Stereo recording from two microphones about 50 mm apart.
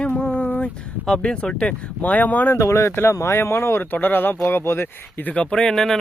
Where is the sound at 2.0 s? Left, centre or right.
Left.